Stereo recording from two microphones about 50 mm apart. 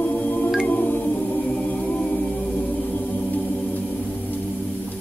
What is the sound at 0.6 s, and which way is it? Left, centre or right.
Music, left.